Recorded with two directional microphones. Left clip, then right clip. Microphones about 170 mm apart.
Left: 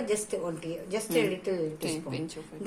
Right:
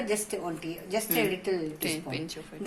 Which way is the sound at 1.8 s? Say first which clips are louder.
Right 1 dB; 5° left (ahead or behind).